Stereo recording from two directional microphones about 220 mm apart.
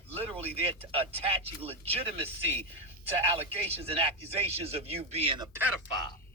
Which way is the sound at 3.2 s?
25° right (ahead or behind).